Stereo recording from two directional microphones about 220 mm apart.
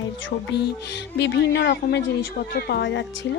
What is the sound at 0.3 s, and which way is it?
Speech, 50° left (ahead or behind).